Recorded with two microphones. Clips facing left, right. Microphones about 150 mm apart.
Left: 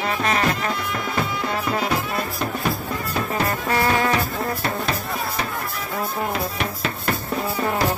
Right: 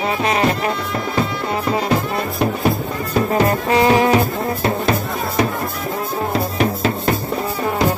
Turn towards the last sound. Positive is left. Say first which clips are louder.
# right 7 dB
turn(degrees=-35)  # may be behind; listen again after turning